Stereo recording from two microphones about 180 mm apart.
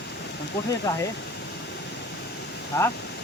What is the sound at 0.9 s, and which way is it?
Speech, 15° left (ahead or behind).